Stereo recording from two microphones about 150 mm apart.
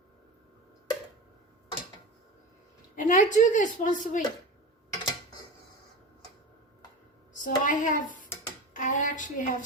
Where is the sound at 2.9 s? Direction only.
60° left (ahead or behind).